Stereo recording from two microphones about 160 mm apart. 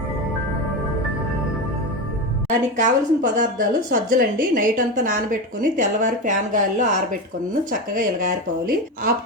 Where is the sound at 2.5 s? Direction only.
50° right (ahead or behind).